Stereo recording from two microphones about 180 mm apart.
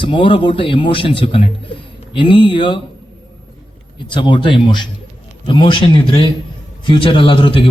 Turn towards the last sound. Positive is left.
turn(degrees=30)  # may be behind; listen again after turning